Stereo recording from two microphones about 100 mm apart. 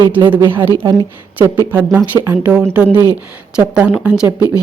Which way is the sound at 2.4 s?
15° right (ahead or behind).